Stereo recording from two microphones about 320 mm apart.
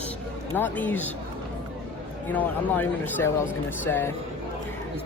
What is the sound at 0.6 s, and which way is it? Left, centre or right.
Speech, centre.